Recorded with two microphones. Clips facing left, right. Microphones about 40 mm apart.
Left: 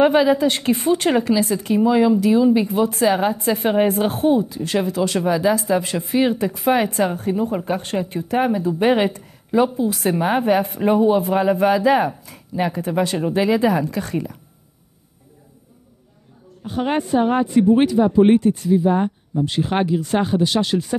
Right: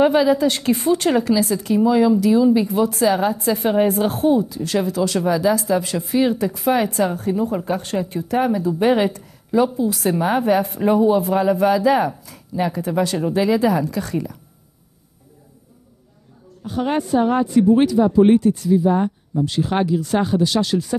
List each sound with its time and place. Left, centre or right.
0.0 s speech: left
16.6 s speech: left